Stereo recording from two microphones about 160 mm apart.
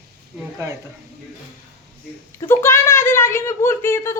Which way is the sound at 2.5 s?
15° left (ahead or behind).